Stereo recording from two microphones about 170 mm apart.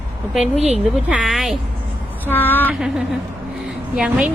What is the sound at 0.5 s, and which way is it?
Speech, 40° right (ahead or behind).